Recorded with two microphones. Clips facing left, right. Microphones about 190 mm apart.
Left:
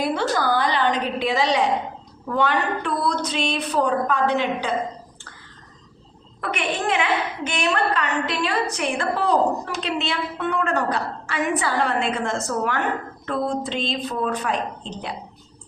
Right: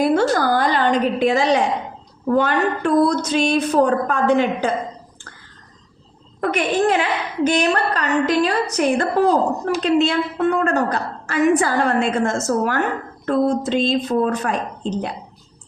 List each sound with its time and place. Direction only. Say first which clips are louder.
0.0 s a sound: right 6 dB; 45° right (ahead or behind)
2.2 s a woman's voice: right 5 dB; 45° right (ahead or behind)
6.4 s a woman's voice: right 7 dB; 40° right (ahead or behind)